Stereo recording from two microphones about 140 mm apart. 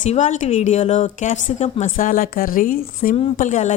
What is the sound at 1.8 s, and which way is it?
A woman's voice, 80° left.